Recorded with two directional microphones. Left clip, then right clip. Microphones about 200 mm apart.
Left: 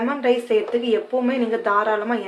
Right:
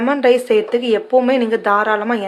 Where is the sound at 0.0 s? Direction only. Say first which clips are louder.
Right 7 dB; 50° right (ahead or behind).